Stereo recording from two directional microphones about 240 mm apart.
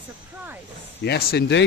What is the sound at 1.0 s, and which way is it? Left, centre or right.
Speech, left.